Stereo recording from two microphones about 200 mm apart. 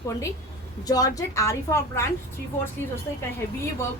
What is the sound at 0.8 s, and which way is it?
A woman's voice, 20° left (ahead or behind).